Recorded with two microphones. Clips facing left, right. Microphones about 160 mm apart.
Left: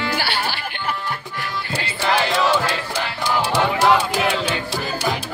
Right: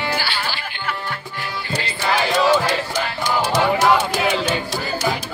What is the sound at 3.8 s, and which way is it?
Speech, centre (ahead or behind).